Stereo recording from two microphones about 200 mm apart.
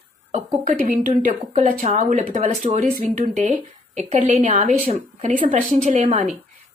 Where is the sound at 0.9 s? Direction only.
45° right (ahead or behind).